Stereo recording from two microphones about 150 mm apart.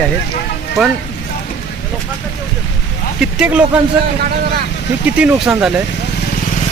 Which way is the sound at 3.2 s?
5° right (ahead or behind).